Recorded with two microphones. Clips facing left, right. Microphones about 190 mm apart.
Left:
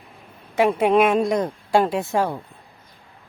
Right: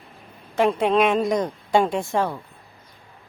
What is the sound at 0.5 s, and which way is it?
Speech, 10° left (ahead or behind).